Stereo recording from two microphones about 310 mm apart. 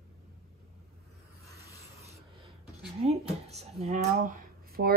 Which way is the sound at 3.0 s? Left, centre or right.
Centre.